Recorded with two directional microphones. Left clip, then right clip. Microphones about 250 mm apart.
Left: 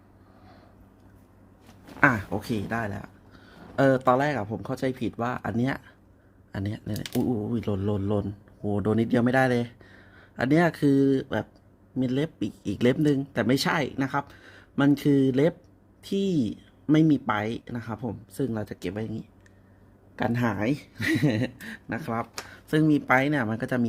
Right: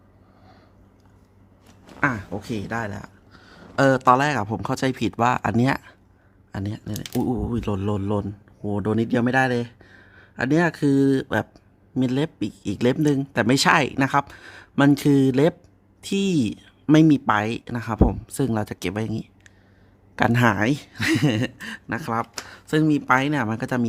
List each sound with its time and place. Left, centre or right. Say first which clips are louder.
2.0 s speech: left 2 dB; centre
7.0 s speech: right 3 dB; right